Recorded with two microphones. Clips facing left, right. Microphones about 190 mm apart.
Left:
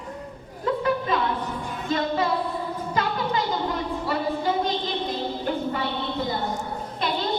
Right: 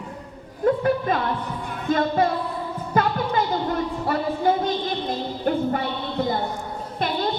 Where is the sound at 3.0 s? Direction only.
55° right (ahead or behind).